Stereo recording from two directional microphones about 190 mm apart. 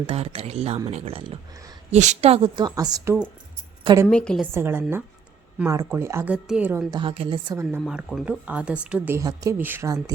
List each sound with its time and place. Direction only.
0.1 s speech: 30° right (ahead or behind); by 3.2 s 15° right (ahead or behind)
4.1 s a woman's voice: 5° left (ahead or behind)
4.5 s a woman's voice: 10° right (ahead or behind)
7.0 s speech: 30° right (ahead or behind)
7.6 s a woman's voice: 10° right (ahead or behind)